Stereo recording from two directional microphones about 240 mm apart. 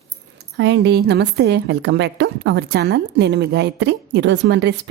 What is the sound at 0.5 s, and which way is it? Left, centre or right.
A woman's voice, right.